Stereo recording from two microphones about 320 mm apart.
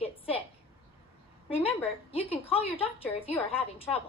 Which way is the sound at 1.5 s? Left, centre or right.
Centre.